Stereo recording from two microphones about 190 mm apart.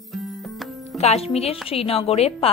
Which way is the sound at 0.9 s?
35° left (ahead or behind).